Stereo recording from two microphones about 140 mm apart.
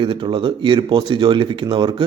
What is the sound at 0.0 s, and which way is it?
A man's voice, 35° right (ahead or behind).